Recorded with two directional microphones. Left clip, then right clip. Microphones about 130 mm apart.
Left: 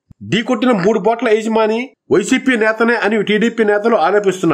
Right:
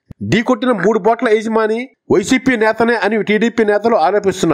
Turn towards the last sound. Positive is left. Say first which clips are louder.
# even
turn(degrees=-40)  # may be behind; listen again after turning